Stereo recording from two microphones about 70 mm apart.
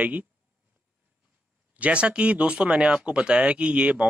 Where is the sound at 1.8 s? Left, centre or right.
Centre.